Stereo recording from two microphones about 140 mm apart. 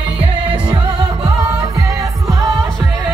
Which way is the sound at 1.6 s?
25° right (ahead or behind).